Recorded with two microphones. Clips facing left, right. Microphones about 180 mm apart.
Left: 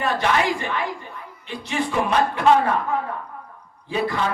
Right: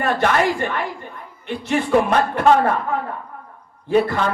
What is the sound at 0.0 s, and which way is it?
A man's voice, 50° right (ahead or behind).